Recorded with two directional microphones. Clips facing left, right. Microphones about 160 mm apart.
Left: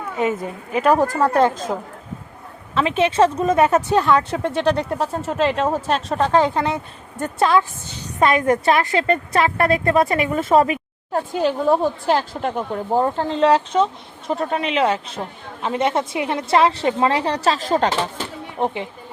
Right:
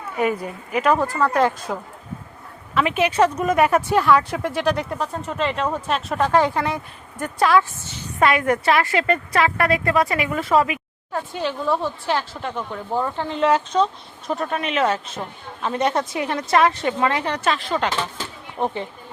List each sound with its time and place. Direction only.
0.2 s speech: 20° left (ahead or behind); by 1.4 s 40° left (ahead or behind)
2.7 s a woman's voice: 25° left (ahead or behind)
4.0 s a woman's voice: 30° left (ahead or behind)
18.6 s speech: 15° left (ahead or behind)